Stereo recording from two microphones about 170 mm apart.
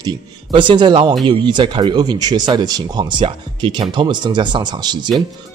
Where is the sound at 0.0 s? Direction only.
30° right (ahead or behind).